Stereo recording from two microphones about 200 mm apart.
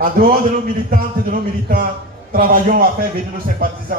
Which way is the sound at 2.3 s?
45° right (ahead or behind).